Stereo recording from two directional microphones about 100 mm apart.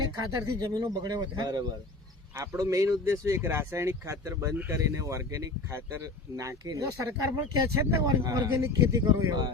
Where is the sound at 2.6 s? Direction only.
30° right (ahead or behind).